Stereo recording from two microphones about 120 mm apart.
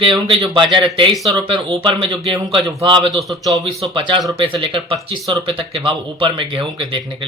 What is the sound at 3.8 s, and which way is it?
Speech, 45° right (ahead or behind).